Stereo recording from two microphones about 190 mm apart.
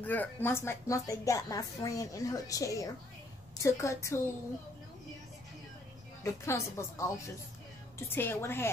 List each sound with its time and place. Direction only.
0.0 s a woman's voice: 10° left (ahead or behind)
6.2 s a woman's voice: 15° left (ahead or behind)
8.1 s a woman's voice: 10° left (ahead or behind)